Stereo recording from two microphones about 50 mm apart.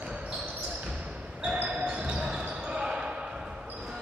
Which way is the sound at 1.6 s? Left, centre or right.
Centre.